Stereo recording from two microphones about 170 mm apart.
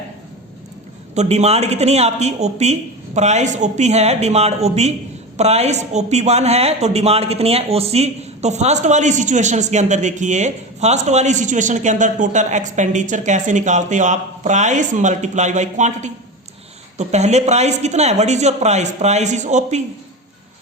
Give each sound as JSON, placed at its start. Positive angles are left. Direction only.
{"t": 1.1, "sound": "speech", "side_deg": -40}